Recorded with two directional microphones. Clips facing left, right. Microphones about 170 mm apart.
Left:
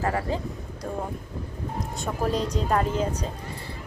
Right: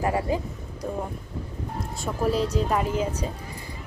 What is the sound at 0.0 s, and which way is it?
Speech, 15° right (ahead or behind).